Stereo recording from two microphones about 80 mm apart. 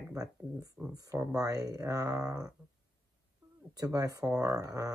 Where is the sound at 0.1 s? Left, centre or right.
Right.